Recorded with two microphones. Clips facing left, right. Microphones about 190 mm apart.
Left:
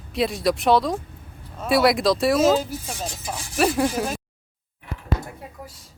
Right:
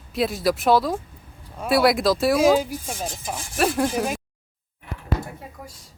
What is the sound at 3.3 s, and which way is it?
Speech, 50° right (ahead or behind).